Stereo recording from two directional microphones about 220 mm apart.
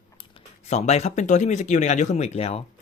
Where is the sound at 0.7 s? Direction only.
30° left (ahead or behind).